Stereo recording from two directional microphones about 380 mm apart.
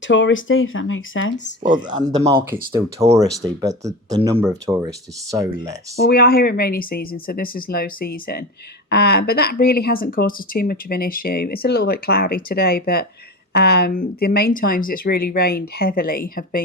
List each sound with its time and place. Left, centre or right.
0.1 s speech: left
1.6 s speech: centre
6.0 s speech: left